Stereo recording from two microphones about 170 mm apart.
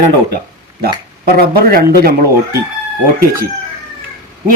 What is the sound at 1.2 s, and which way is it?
Speech, 60° right (ahead or behind).